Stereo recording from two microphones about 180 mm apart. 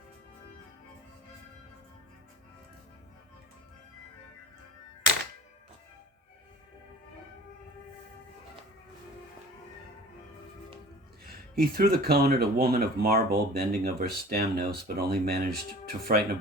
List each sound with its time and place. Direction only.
11.5 s speech: 55° right (ahead or behind)